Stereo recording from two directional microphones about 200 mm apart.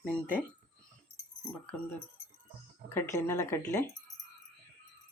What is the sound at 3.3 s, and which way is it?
Speech, 15° left (ahead or behind).